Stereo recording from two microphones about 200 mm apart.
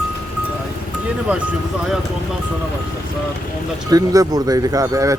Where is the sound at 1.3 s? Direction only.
5° right (ahead or behind).